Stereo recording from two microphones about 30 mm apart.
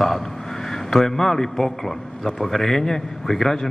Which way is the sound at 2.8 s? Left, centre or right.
Centre.